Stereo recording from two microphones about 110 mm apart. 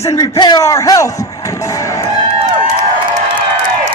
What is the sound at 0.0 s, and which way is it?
Speech, 30° left (ahead or behind).